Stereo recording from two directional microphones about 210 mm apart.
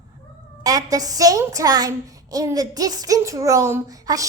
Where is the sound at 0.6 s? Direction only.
15° right (ahead or behind).